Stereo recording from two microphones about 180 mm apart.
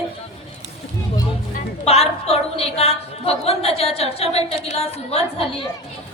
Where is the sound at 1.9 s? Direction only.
35° left (ahead or behind).